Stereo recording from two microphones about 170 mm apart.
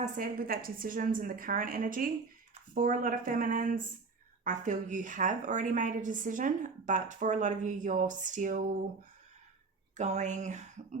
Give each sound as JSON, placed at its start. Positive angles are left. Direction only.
{"t": 0.0, "sound": "a woman's voice", "side_deg": -55}
{"t": 10.0, "sound": "a woman's voice", "side_deg": -45}